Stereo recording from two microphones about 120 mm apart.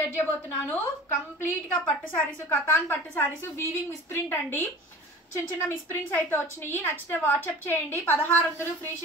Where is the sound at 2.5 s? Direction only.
20° left (ahead or behind).